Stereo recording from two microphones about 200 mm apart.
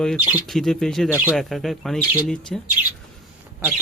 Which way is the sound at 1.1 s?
10° right (ahead or behind).